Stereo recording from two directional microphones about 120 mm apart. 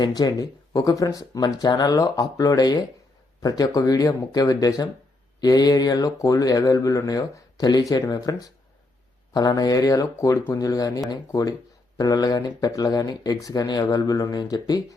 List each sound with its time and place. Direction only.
0.2 s speech: 30° left (ahead or behind)